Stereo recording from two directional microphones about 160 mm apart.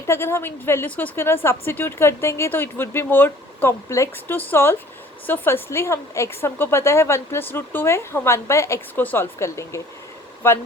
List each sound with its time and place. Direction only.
0.1 s a woman's voice: 15° left (ahead or behind)